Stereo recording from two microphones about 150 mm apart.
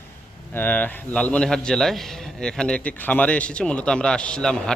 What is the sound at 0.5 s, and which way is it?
Speech, 10° left (ahead or behind).